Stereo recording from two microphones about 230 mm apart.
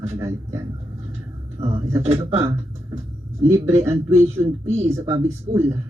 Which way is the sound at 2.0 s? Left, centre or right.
Right.